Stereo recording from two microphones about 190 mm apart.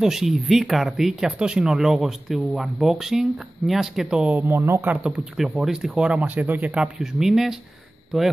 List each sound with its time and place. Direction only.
0.0 s speech: centre (ahead or behind)